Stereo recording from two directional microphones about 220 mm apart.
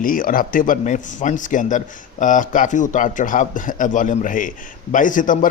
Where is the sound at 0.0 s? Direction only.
40° left (ahead or behind).